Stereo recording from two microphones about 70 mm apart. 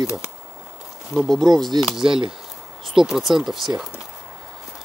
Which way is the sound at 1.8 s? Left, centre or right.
Centre.